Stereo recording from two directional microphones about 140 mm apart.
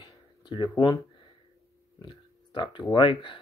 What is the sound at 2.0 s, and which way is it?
Speech, 35° left (ahead or behind).